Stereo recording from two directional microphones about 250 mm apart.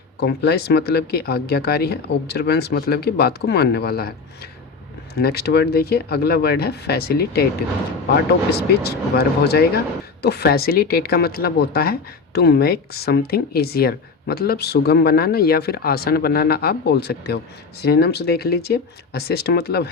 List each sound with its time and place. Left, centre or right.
0.2 s speech: left
5.1 s speech: left
8.5 s speech: left